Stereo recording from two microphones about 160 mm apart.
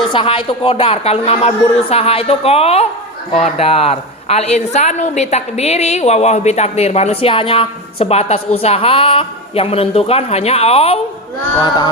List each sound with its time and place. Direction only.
0.1 s a woman's voice: 35° left (ahead or behind)